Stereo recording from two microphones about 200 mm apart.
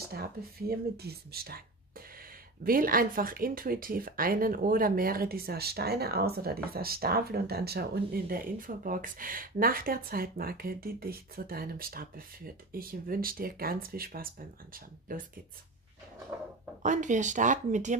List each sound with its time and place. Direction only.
0.1 s speech: 50° right (ahead or behind)
16.8 s speech: 40° right (ahead or behind)